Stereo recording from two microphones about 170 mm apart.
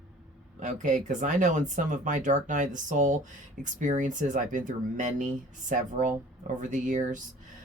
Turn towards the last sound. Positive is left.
turn(degrees=-50)  # may be behind; listen again after turning